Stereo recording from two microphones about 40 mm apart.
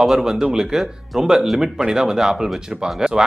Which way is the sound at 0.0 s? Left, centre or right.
Centre.